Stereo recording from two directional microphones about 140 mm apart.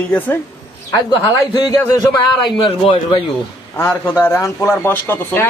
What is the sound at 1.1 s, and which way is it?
A man's voice, 30° left (ahead or behind).